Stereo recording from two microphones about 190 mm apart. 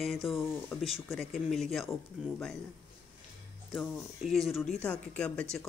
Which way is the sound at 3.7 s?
Centre (ahead or behind).